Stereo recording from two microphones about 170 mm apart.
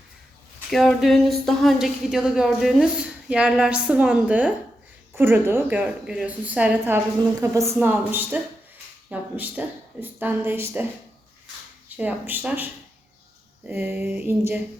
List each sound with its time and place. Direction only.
0.7 s a woman's voice: centre (ahead or behind)
11.9 s a woman's voice: 10° right (ahead or behind)
13.7 s a woman's voice: 10° right (ahead or behind)